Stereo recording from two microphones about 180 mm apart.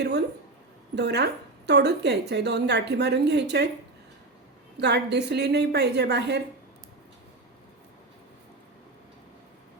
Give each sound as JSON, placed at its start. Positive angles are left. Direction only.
{"t": 0.9, "sound": "a woman's voice", "side_deg": -70}
{"t": 4.8, "sound": "a woman's voice", "side_deg": -70}